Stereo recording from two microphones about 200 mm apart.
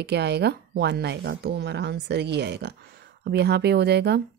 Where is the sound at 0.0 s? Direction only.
55° right (ahead or behind).